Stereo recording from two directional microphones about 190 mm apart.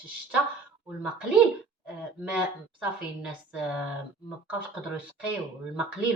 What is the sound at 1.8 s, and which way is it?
Speech, 5° right (ahead or behind).